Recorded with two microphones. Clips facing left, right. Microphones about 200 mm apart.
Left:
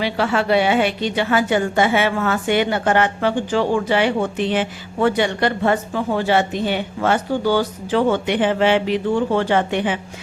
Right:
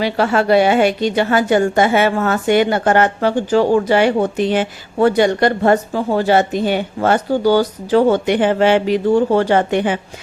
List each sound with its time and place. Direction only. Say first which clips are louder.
0.0 s a woman's voice: right 4 dB; 45° right (ahead or behind)